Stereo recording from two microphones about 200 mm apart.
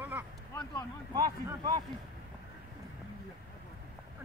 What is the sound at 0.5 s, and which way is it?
Speech, 15° left (ahead or behind).